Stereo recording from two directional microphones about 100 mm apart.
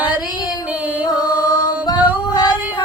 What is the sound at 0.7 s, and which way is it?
Music, 15° right (ahead or behind).